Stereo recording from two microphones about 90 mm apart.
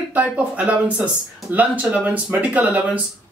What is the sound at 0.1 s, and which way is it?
Speech, 15° right (ahead or behind).